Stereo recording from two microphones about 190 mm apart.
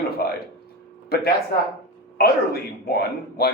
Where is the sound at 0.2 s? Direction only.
55° left (ahead or behind).